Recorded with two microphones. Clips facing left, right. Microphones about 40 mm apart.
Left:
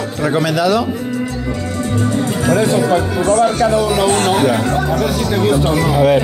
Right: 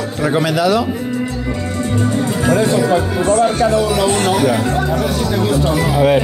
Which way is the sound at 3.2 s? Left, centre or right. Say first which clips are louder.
Left 1 dB; right.